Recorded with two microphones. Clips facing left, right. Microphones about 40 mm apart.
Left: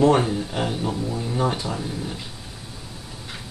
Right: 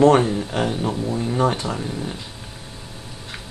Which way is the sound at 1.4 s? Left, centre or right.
Right.